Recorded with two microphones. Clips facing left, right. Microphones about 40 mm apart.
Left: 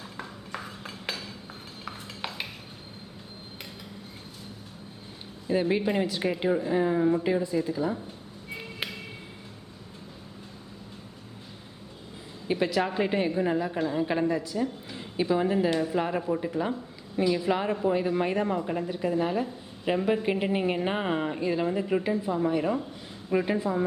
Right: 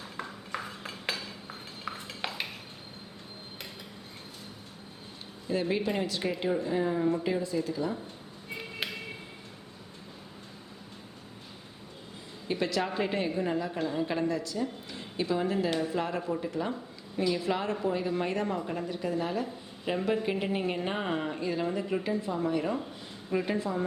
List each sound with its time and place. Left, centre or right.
0.0 s a sound: centre
5.5 s a woman's voice: centre
8.5 s music: centre
12.5 s a woman's voice: centre
15.7 s speech: centre
16.0 s a woman's voice: centre